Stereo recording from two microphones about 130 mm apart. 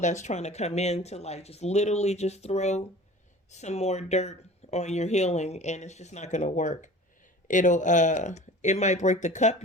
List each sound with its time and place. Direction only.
0.0 s speech: 65° left (ahead or behind)